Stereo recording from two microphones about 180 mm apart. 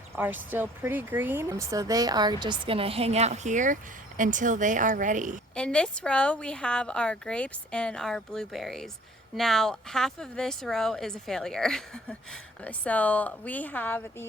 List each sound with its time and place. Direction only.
0.2 s a woman's voice: 10° right (ahead or behind); by 5.4 s 45° right (ahead or behind)
5.5 s speech: 5° left (ahead or behind)